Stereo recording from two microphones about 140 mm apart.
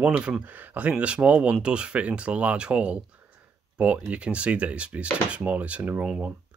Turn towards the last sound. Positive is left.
turn(degrees=-10)  # may be behind; listen again after turning